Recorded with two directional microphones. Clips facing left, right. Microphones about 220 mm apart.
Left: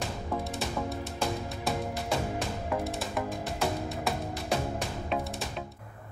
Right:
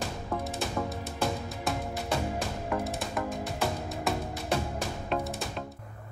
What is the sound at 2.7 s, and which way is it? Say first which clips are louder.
Music: even; centre (ahead or behind).